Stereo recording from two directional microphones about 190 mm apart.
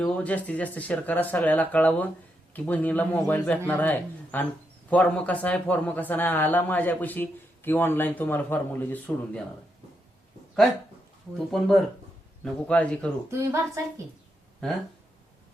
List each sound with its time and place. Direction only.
0.0 s speech: 5° left (ahead or behind)
11.3 s a man's voice: centre (ahead or behind)
13.3 s a woman's voice: 15° right (ahead or behind)